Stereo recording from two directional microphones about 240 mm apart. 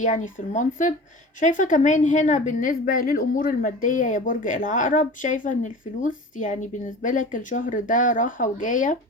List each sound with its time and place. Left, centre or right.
0.0 s a woman's voice: left